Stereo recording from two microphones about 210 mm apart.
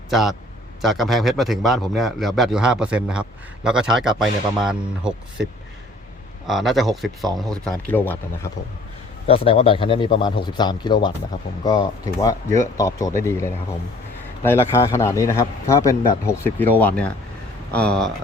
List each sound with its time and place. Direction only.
0.1 s a man's voice: centre (ahead or behind)
6.5 s a man's voice: centre (ahead or behind)
9.2 s speech: 25° left (ahead or behind); by 18.1 s 5° left (ahead or behind)